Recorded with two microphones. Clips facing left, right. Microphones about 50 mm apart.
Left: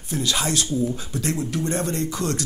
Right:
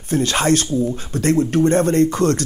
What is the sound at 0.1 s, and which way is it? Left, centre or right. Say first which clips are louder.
Speech: right 8 dB; right.